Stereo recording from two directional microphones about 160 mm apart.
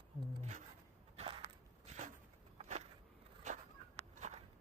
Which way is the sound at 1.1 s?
40° right (ahead or behind).